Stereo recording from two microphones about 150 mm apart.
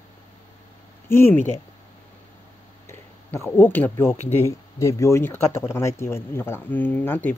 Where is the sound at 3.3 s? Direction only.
15° left (ahead or behind).